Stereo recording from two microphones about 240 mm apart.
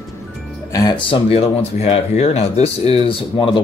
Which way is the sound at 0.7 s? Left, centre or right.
Centre.